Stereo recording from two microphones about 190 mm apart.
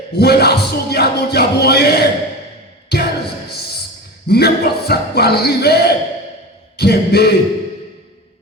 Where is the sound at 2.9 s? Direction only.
60° left (ahead or behind).